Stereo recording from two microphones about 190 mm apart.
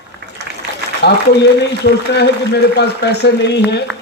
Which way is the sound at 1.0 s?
60° left (ahead or behind).